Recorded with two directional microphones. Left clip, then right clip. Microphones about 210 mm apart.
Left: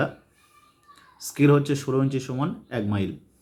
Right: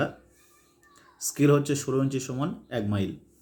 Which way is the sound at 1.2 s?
Centre (ahead or behind).